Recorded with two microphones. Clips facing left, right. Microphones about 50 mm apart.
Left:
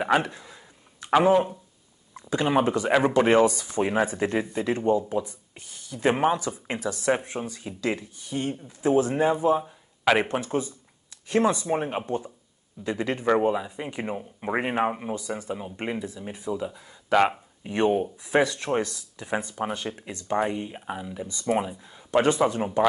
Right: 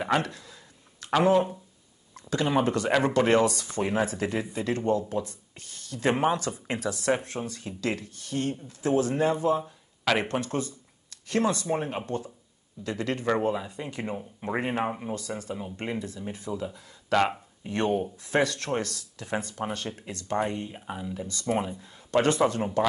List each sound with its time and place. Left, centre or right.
0.0 s speech: centre